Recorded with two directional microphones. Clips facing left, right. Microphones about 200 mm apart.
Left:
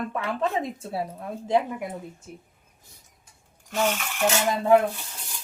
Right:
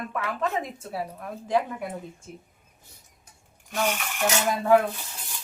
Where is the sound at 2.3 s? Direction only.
5° left (ahead or behind).